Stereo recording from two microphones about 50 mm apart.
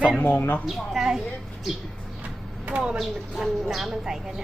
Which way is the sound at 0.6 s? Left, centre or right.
Centre.